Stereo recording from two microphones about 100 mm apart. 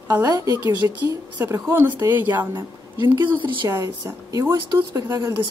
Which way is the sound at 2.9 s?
40° right (ahead or behind).